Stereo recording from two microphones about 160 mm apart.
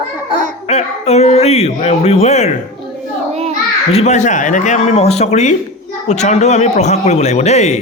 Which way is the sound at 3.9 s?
45° left (ahead or behind).